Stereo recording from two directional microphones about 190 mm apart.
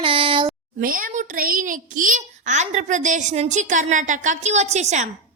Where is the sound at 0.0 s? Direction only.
25° right (ahead or behind).